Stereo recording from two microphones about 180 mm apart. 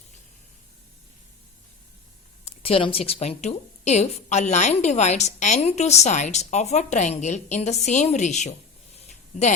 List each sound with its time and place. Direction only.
2.4 s speech: 30° left (ahead or behind)